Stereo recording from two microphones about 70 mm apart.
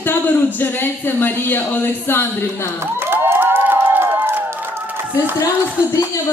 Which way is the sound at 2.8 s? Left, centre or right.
Right.